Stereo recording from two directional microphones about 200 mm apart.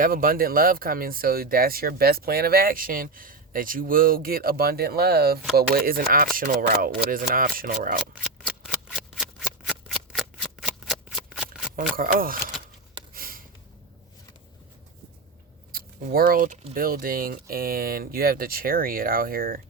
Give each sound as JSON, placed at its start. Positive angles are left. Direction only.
{"t": 0.0, "sound": "speech", "side_deg": -45}
{"t": 8.1, "sound": "shuffling cards", "side_deg": 0}
{"t": 11.9, "sound": "speech", "side_deg": -45}
{"t": 13.1, "sound": "a sound", "side_deg": -45}
{"t": 15.7, "sound": "speech", "side_deg": -45}